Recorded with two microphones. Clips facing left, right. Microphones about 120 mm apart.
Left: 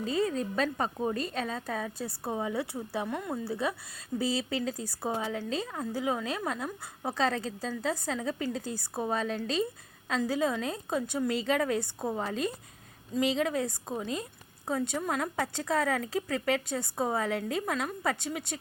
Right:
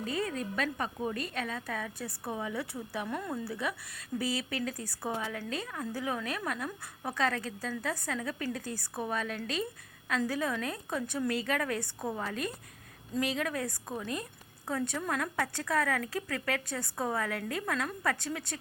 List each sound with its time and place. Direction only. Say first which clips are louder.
0.0 s a woman's voice: left 5 dB; 25° left (ahead or behind)
3.1 s speech: left 2 dB; 15° left (ahead or behind)
3.3 s a woman's voice: left 3 dB; 30° left (ahead or behind)